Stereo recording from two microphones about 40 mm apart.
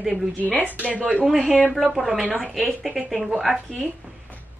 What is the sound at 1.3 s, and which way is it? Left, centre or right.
Speech, centre.